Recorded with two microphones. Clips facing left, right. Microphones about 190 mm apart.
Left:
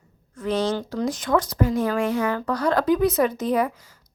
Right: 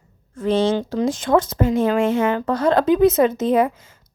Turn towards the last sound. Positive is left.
turn(degrees=-25)  # may be behind; listen again after turning